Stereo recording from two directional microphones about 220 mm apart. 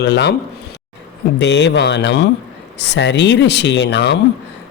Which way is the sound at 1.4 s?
50° left (ahead or behind).